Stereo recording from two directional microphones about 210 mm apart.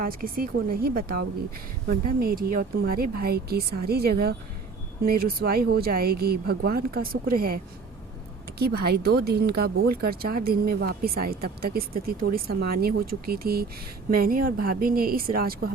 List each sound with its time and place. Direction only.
0.0 s speech: 45° right (ahead or behind)